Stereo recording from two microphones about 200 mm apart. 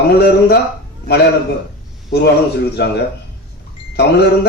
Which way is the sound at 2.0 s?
55° left (ahead or behind).